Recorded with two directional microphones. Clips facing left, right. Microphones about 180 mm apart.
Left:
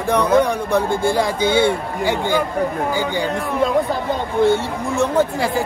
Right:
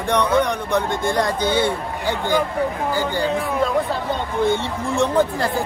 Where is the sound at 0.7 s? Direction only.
30° left (ahead or behind).